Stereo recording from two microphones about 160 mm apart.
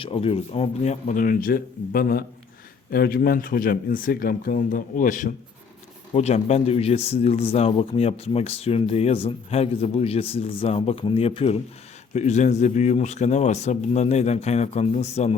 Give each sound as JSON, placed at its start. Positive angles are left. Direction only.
{"t": 0.0, "sound": "speech", "side_deg": 35}
{"t": 6.1, "sound": "a man's voice", "side_deg": 45}